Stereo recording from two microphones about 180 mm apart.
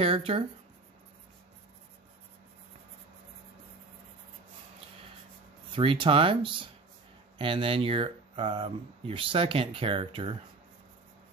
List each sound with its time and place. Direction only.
0.0 s speech: 30° right (ahead or behind)
5.8 s speech: 30° right (ahead or behind)